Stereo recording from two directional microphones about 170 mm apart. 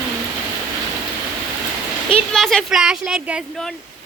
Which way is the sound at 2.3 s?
Centre (ahead or behind).